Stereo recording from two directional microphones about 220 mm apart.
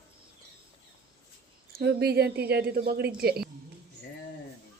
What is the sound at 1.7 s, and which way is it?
A woman's voice, 45° right (ahead or behind).